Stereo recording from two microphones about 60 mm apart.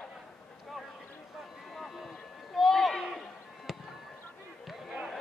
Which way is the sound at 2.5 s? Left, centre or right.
Centre.